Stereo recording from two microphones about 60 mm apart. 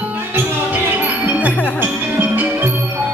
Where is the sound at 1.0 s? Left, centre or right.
Right.